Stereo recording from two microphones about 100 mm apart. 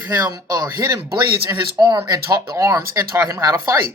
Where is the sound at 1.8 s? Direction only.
45° right (ahead or behind); by 3.7 s 25° right (ahead or behind).